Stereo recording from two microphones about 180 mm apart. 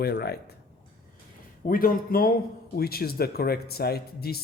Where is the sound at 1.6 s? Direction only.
50° left (ahead or behind).